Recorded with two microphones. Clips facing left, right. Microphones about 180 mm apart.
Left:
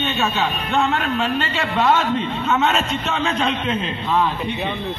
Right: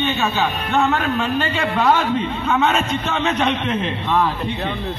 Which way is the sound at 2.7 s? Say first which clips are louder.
Right 1 dB; 35° left (ahead or behind).